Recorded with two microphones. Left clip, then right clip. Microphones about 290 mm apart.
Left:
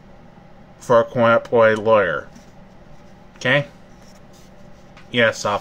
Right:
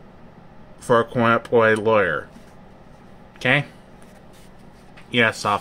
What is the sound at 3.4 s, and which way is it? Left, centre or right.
Speech, centre.